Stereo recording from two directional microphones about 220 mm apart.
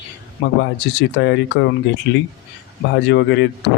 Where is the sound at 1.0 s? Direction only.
50° left (ahead or behind).